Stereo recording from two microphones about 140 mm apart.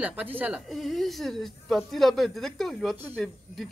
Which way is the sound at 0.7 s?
Centre (ahead or behind).